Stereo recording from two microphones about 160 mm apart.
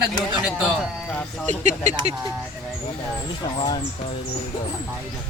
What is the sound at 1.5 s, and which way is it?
Speech, 50° right (ahead or behind).